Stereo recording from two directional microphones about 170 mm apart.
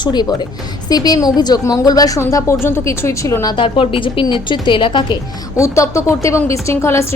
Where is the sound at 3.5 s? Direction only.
30° left (ahead or behind).